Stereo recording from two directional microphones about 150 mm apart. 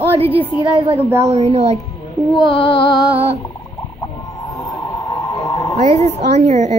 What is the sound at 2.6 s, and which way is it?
Music, 35° left (ahead or behind).